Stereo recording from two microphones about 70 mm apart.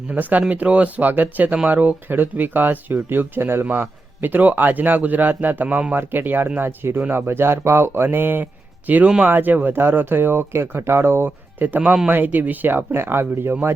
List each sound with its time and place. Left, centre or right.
0.1 s speech: right
6.0 s speech: right